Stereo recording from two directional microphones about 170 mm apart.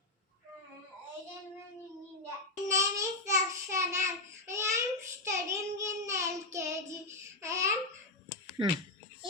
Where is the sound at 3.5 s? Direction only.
15° right (ahead or behind).